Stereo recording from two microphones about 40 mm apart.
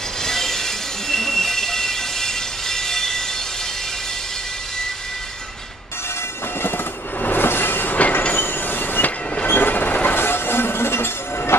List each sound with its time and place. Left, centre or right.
0.2 s train wheels squealing: centre
7.2 s train: left
7.4 s train: left
10.1 s train: left